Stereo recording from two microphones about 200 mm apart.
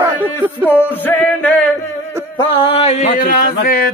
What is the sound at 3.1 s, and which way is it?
Speech, 45° left (ahead or behind).